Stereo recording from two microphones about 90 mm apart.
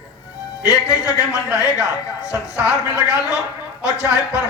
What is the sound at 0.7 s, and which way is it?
Speech, 35° left (ahead or behind).